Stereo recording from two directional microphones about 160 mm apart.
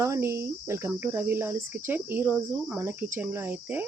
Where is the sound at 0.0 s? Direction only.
15° right (ahead or behind).